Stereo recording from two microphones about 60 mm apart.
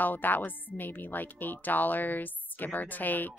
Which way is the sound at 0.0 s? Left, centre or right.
Left.